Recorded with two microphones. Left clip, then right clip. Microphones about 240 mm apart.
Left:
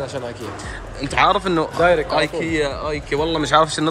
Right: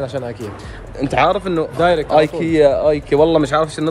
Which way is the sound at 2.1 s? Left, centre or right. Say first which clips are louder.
Right 5 dB; centre.